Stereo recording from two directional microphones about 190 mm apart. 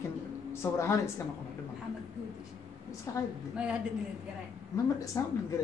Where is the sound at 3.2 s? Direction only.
15° left (ahead or behind).